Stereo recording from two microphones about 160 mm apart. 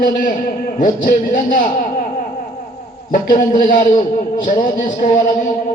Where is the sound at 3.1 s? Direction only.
60° left (ahead or behind).